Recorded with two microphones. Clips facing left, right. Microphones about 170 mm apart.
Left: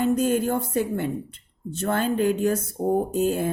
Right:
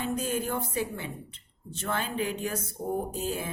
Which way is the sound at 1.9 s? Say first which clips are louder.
Left 8 dB; 50° left (ahead or behind).